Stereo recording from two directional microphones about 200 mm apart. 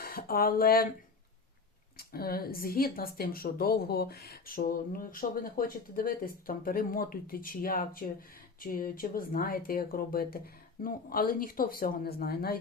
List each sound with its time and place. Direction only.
0.0 s speech: 45° left (ahead or behind)
2.0 s speech: 50° left (ahead or behind)